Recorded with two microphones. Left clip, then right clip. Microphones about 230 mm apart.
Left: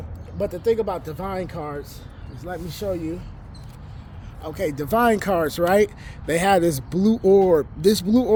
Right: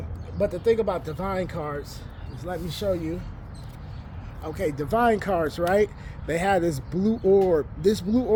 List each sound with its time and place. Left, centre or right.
0.3 s speech: left
4.4 s speech: left